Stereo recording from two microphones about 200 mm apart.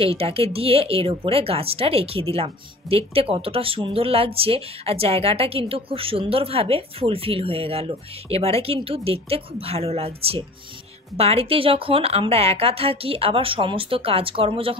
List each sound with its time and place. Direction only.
0.0 s speech: 30° right (ahead or behind)